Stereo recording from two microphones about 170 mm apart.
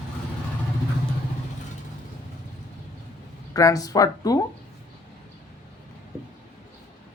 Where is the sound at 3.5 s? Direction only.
20° left (ahead or behind).